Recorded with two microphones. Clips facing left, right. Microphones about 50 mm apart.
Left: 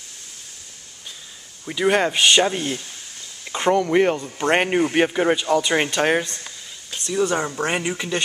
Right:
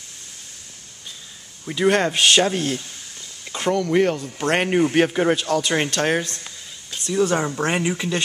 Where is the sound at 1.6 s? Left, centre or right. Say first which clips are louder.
Even; centre.